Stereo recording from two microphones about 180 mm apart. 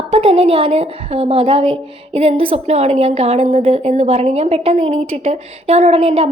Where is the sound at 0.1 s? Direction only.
30° right (ahead or behind).